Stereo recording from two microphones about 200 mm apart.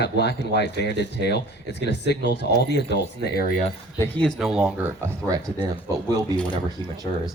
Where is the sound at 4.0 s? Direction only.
5° left (ahead or behind).